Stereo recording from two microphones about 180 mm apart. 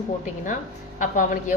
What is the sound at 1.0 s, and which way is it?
Speech, 45° left (ahead or behind).